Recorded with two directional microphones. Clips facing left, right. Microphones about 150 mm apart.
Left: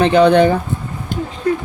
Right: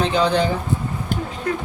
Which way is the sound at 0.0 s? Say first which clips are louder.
Left 8 dB; 60° left (ahead or behind).